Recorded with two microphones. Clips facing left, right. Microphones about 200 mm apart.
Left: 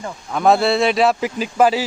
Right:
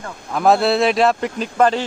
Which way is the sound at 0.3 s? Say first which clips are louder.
Even; centre (ahead or behind).